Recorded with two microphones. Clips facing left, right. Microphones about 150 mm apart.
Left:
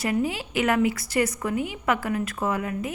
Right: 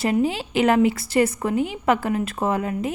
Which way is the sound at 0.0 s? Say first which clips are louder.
Right 4 dB; 25° right (ahead or behind).